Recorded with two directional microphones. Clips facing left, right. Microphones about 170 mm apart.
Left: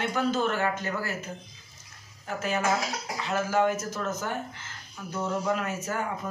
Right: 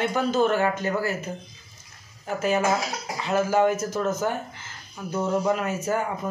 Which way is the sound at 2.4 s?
15° right (ahead or behind).